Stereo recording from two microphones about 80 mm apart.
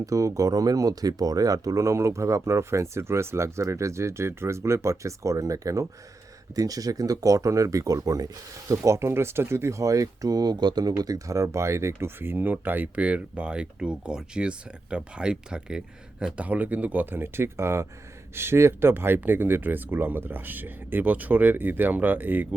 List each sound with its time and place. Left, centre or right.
0.0 s speech: right